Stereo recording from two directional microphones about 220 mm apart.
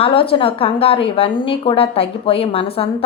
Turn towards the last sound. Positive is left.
turn(degrees=25)  # may be behind; listen again after turning